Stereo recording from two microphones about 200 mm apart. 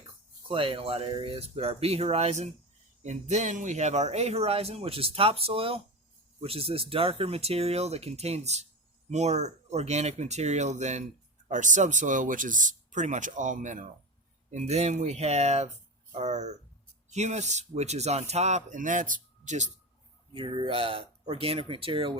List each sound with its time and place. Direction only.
0.4 s speech: 25° right (ahead or behind)
20.3 s speech: 25° right (ahead or behind)